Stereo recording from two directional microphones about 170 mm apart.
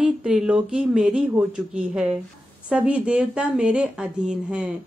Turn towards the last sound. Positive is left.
turn(degrees=-5)  # may be behind; listen again after turning